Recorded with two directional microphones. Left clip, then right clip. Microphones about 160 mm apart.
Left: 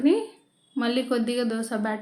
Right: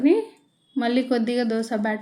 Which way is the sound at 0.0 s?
10° right (ahead or behind).